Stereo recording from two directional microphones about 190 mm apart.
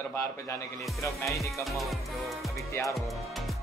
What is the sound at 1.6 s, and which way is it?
Music, centre (ahead or behind).